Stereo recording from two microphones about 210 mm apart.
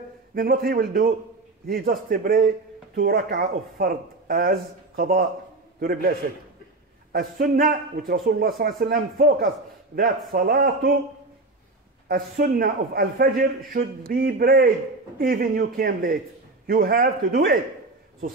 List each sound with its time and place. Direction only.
0.3 s a man's voice: 45° right (ahead or behind)
12.1 s a man's voice: 45° right (ahead or behind)